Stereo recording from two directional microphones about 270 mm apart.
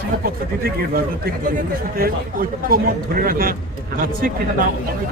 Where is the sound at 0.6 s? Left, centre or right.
Right.